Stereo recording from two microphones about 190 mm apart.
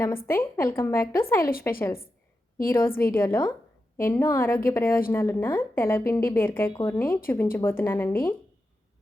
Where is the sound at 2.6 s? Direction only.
10° left (ahead or behind).